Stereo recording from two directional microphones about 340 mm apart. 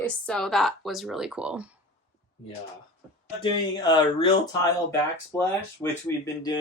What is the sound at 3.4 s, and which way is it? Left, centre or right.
Speech, centre.